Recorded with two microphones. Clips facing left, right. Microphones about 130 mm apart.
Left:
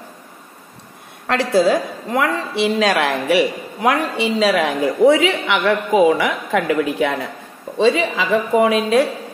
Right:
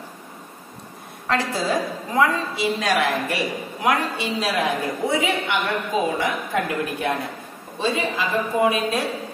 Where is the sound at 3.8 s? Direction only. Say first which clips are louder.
Left 5 dB; 60° left (ahead or behind); by 9.0 s 90° left.